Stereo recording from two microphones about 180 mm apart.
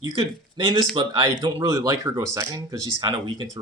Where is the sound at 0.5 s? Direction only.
25° right (ahead or behind).